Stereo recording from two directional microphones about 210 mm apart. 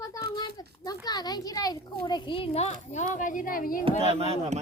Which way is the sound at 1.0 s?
20° left (ahead or behind).